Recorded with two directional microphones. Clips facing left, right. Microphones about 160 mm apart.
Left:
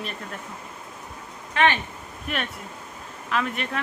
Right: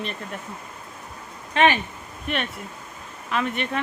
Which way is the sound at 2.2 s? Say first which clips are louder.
Right 2 dB; centre (ahead or behind).